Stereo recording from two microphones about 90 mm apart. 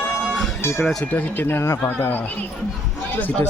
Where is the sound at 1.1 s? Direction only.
20° left (ahead or behind).